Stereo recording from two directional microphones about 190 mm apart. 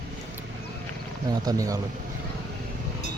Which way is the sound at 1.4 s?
20° right (ahead or behind).